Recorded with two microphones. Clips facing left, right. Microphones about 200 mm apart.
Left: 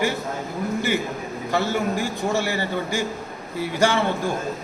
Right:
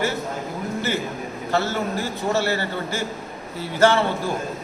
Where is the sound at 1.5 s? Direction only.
15° left (ahead or behind).